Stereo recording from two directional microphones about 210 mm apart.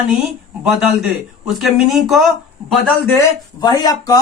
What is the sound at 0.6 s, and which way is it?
Speech, centre (ahead or behind).